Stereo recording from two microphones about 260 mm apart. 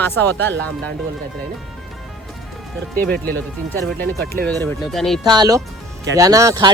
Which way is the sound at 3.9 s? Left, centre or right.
Right.